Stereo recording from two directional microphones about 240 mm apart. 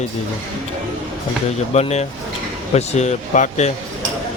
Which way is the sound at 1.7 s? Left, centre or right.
Left.